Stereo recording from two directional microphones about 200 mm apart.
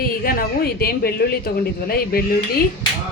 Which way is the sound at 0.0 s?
45° left (ahead or behind).